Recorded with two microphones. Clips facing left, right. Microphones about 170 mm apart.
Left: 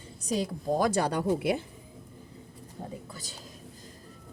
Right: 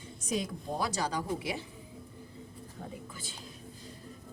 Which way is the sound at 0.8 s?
55° left (ahead or behind).